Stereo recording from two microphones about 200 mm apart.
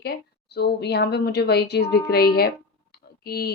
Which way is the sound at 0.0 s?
50° left (ahead or behind).